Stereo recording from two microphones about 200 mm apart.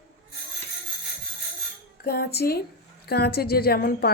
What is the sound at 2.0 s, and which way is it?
Speech, 50° left (ahead or behind).